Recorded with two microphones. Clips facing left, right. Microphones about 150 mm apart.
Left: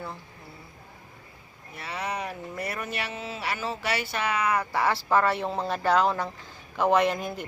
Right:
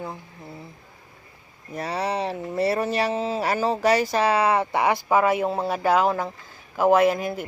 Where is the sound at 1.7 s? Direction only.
40° right (ahead or behind).